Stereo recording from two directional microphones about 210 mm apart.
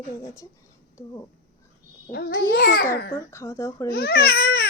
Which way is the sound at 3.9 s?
45° left (ahead or behind).